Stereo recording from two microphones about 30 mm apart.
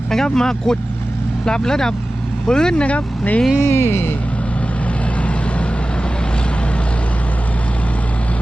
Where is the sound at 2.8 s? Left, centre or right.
Left.